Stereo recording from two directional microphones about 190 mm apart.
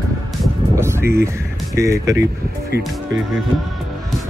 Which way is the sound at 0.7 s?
15° right (ahead or behind).